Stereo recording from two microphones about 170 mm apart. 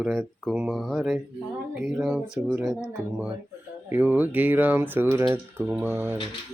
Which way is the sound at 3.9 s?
10° right (ahead or behind).